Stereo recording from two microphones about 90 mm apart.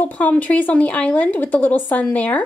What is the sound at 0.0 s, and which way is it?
A woman's voice, 20° left (ahead or behind).